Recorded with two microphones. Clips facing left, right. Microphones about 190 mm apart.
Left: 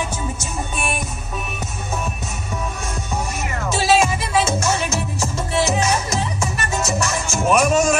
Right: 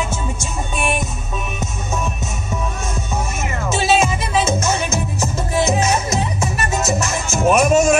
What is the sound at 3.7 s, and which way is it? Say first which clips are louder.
Music: even; 20° right (ahead or behind).